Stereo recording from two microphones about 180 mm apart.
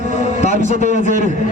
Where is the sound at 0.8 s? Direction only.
45° right (ahead or behind).